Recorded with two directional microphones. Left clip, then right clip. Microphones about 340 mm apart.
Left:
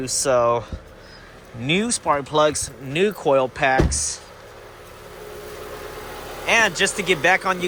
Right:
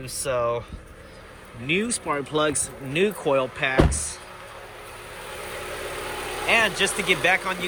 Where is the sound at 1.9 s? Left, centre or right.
Centre.